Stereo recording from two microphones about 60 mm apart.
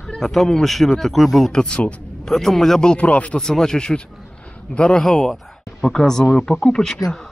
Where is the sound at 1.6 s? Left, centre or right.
Centre.